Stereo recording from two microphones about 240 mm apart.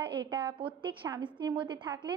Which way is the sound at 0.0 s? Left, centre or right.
Centre.